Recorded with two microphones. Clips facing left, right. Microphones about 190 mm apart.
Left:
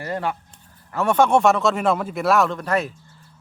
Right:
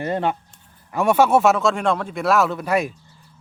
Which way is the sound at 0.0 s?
20° right (ahead or behind).